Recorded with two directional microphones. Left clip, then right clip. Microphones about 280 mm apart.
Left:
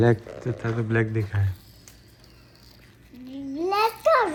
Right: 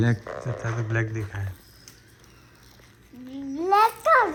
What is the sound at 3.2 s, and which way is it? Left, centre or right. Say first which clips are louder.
Babbling: right 2 dB; centre.